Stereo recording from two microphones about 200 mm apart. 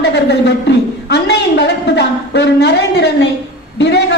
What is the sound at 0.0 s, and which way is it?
Speech, 55° left (ahead or behind).